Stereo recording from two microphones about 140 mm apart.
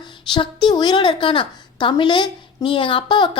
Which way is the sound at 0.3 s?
30° left (ahead or behind).